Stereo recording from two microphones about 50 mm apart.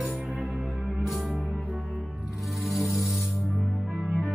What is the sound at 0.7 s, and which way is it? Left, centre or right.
Music, centre.